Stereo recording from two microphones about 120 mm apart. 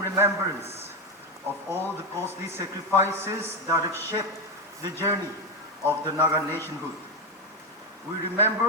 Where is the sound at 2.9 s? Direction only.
20° right (ahead or behind).